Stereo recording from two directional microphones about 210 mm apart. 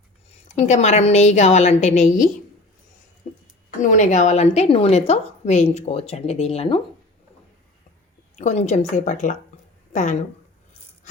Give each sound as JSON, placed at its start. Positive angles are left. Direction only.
{"t": 0.4, "sound": "a woman's voice", "side_deg": 35}
{"t": 3.3, "sound": "a sound", "side_deg": 35}
{"t": 3.8, "sound": "a woman's voice", "side_deg": 35}
{"t": 8.4, "sound": "a woman's voice", "side_deg": 35}